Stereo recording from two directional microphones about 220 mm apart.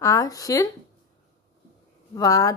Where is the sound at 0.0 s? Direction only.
15° left (ahead or behind).